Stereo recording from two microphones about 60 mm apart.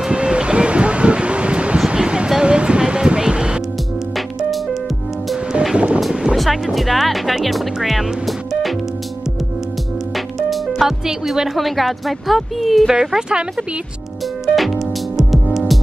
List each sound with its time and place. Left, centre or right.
0.0 s a sound: centre
1.9 s music: centre
5.5 s music: centre
6.3 s speech: centre
10.1 s speech: centre
14.4 s music: centre